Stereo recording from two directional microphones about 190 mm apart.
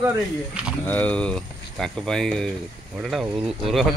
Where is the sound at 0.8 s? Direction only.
10° left (ahead or behind).